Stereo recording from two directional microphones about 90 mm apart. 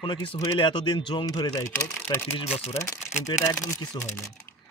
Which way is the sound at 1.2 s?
50° left (ahead or behind).